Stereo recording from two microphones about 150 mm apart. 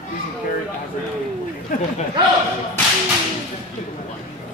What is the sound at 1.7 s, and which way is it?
Speech, 65° left (ahead or behind).